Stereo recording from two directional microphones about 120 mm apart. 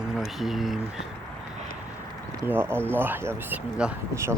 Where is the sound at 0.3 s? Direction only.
Centre (ahead or behind).